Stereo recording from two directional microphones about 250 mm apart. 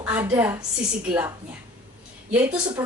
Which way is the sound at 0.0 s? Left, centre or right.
Centre.